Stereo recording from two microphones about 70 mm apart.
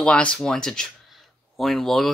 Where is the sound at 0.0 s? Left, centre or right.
Centre.